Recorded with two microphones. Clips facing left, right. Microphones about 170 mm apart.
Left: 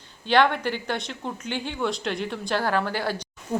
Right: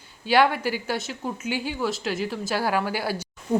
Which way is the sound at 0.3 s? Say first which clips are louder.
Even; 5° right (ahead or behind).